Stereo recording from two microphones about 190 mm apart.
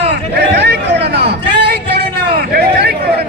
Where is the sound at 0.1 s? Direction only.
60° right (ahead or behind).